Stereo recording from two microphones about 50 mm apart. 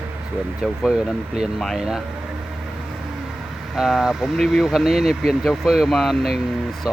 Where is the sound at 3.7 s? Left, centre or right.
Centre.